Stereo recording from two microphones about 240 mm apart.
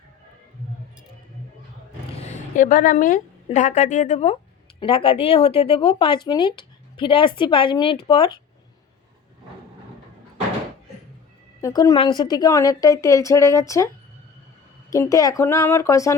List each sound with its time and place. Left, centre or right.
2.2 s a woman's voice: left
11.6 s a woman's voice: centre